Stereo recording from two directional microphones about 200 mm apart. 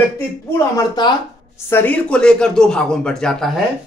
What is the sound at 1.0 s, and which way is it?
Speech, 20° left (ahead or behind).